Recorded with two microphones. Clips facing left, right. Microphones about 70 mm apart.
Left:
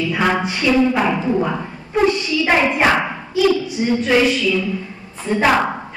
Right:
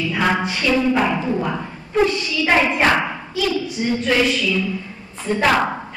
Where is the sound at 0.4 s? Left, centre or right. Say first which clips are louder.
Left 3 dB; centre.